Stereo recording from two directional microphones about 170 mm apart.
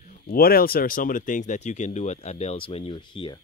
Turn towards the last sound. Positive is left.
turn(degrees=30)  # may be behind; listen again after turning